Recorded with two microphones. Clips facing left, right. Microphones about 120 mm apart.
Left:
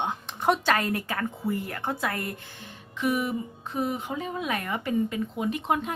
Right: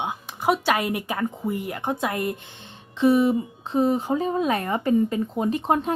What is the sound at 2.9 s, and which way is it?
A woman's voice, 30° right (ahead or behind).